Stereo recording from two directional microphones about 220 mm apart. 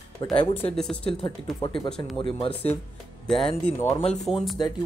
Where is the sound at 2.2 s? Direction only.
25° left (ahead or behind).